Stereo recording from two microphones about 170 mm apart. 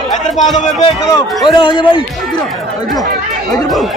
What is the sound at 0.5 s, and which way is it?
Speech, 45° left (ahead or behind).